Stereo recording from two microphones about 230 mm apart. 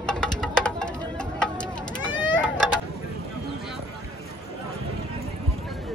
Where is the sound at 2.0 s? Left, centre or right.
Centre.